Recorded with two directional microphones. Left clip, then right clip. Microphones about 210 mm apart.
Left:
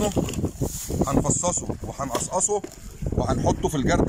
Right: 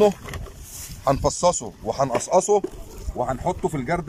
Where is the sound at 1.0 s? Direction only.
25° right (ahead or behind).